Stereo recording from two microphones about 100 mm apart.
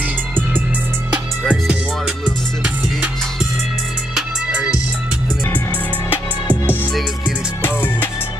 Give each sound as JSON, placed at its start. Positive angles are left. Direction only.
{"t": 1.5, "sound": "music", "side_deg": -10}
{"t": 6.4, "sound": "music", "side_deg": 20}